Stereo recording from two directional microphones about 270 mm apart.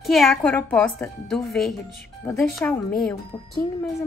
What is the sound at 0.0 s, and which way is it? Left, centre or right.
Speech, centre.